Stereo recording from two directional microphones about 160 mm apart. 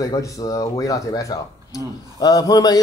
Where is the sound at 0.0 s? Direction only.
20° left (ahead or behind).